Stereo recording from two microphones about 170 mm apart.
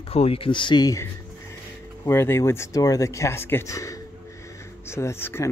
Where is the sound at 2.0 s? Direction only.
15° left (ahead or behind).